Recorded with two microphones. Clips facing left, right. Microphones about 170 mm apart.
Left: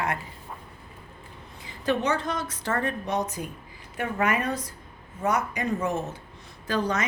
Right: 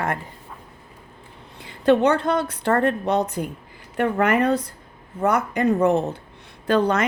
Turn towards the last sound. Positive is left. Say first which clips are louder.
# right 7 dB
turn(degrees=-60)  # may be behind; listen again after turning